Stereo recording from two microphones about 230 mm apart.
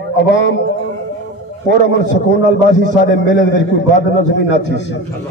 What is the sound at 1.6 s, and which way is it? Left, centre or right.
A man's voice, left.